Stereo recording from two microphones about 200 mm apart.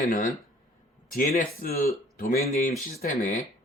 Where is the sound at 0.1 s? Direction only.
40° left (ahead or behind).